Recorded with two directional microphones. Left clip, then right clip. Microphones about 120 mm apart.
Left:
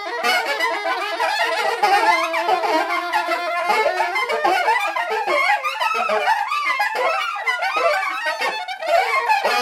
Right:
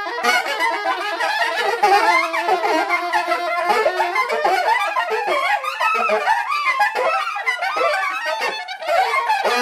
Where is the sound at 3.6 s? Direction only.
25° left (ahead or behind).